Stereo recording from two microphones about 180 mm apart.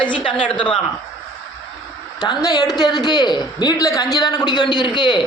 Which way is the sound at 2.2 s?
20° left (ahead or behind).